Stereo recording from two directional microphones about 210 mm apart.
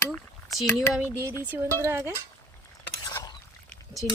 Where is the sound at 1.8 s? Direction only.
10° right (ahead or behind).